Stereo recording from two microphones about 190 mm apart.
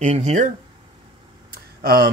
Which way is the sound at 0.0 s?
35° right (ahead or behind).